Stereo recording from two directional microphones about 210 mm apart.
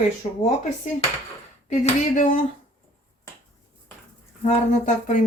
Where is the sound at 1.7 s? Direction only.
35° left (ahead or behind).